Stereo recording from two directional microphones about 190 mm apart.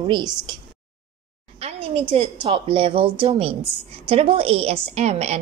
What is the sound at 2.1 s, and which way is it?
A woman's voice, 30° right (ahead or behind).